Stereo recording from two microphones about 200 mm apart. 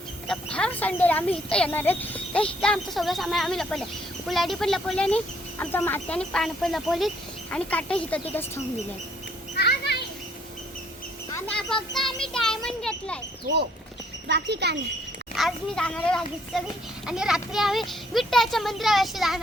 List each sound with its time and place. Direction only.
0.3 s speech: 5° left (ahead or behind)
9.6 s children playing: 55° left (ahead or behind)
11.3 s a sound: 10° left (ahead or behind)
14.3 s speech: 60° right (ahead or behind)
15.4 s speech: centre (ahead or behind)